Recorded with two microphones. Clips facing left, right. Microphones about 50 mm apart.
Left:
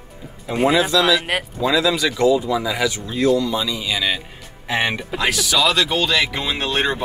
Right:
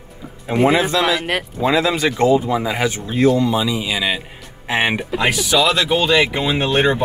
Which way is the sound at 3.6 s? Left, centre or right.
Centre.